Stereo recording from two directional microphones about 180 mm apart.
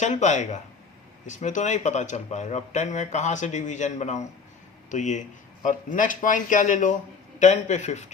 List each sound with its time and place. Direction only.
0.0 s speech: 40° left (ahead or behind)